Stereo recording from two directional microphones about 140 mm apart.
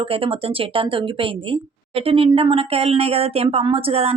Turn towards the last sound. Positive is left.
turn(degrees=-45)  # may be behind; listen again after turning